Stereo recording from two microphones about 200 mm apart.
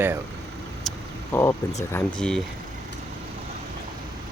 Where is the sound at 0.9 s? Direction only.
10° left (ahead or behind).